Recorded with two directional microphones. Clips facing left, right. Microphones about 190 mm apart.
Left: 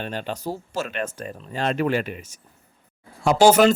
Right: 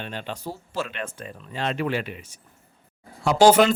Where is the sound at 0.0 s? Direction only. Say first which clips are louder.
Left 4 dB; 40° left (ahead or behind).